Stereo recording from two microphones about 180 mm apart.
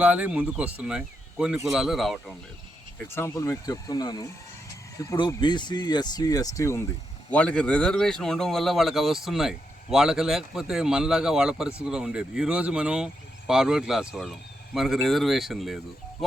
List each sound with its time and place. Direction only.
0.0 s speech: 10° right (ahead or behind)
3.1 s speech: 15° left (ahead or behind)